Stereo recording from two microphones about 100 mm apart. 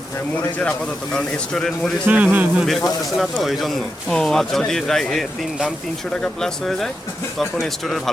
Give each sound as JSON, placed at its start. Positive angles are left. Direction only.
{"t": 1.1, "sound": "speech", "side_deg": 5}
{"t": 2.0, "sound": "speech", "side_deg": -15}
{"t": 2.6, "sound": "speech", "side_deg": 0}
{"t": 6.2, "sound": "speech", "side_deg": 5}